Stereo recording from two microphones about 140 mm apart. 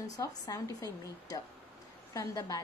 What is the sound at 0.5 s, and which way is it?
A woman's voice, 25° left (ahead or behind).